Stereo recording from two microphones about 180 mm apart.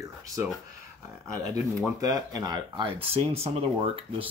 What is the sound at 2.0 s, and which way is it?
Speech, 20° right (ahead or behind).